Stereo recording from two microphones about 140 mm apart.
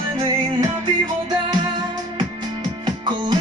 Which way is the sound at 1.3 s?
30° right (ahead or behind).